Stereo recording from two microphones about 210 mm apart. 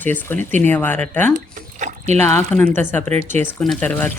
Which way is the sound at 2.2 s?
10° left (ahead or behind).